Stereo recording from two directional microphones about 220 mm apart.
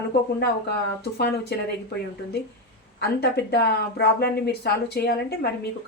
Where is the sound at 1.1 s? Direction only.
45° left (ahead or behind).